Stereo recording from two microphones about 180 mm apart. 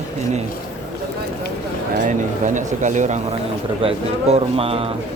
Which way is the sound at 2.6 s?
45° right (ahead or behind).